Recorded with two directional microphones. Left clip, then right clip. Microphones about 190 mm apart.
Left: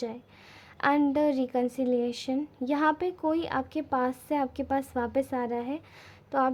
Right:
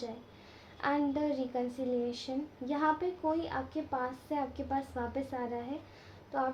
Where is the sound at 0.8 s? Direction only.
45° left (ahead or behind).